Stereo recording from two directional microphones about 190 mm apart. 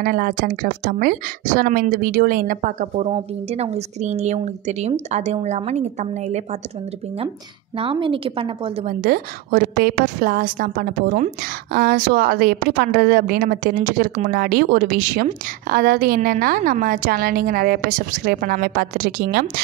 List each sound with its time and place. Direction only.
0.0 s a woman's voice: 45° right (ahead or behind)
3.1 s a woman's voice: 30° right (ahead or behind)
7.7 s a woman's voice: 30° right (ahead or behind)
8.8 s a woman's voice: 45° right (ahead or behind)